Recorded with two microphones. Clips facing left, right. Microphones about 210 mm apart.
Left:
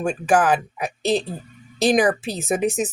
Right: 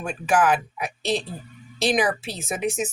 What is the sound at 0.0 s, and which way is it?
Speech, 45° left (ahead or behind).